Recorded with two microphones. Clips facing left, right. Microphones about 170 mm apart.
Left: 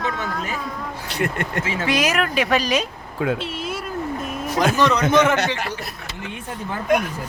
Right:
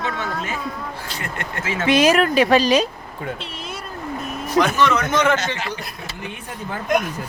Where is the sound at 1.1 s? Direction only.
60° left (ahead or behind).